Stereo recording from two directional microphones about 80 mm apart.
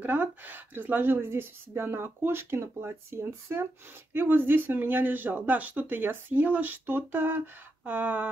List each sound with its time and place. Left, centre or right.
0.0 s speech: right